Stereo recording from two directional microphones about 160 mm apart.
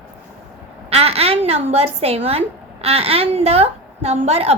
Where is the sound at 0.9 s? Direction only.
40° right (ahead or behind).